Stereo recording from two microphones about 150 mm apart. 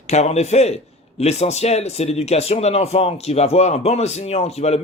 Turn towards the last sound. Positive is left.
turn(degrees=45)  # may be behind; listen again after turning